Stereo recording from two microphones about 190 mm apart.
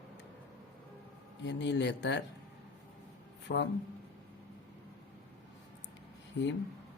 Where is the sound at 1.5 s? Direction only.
70° left (ahead or behind).